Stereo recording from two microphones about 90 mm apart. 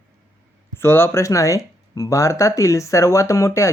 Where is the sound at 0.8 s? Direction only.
25° left (ahead or behind).